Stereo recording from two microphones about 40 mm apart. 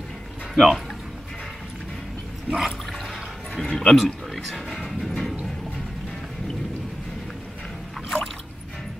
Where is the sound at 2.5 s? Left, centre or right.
Centre.